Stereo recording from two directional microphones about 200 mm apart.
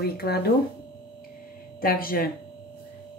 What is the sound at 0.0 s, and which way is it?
Speech, 50° left (ahead or behind).